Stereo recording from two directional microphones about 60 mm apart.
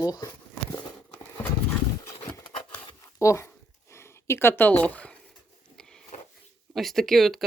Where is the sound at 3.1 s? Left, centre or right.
Left.